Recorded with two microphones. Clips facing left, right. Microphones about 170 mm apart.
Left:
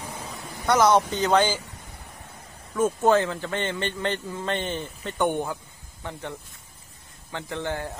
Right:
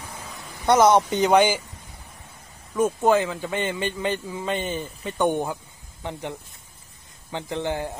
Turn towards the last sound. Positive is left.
turn(degrees=-20)  # may be behind; listen again after turning